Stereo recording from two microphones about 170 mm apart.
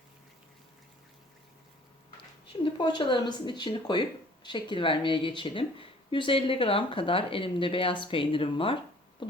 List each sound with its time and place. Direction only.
2.7 s speech: 30° left (ahead or behind)